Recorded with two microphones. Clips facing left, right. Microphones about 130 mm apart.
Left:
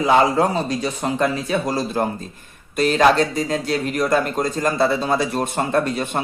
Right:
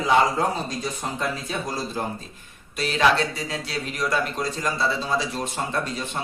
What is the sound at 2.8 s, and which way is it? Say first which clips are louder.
Speech: left 6 dB; 45° left (ahead or behind).